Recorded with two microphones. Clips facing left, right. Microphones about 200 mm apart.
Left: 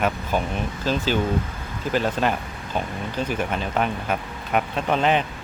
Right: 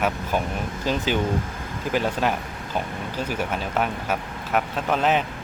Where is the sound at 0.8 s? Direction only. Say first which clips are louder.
Left 1 dB; 15° right (ahead or behind).